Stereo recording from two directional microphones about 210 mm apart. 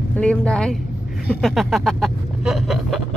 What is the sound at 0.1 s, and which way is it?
Vehicle, 5° left (ahead or behind).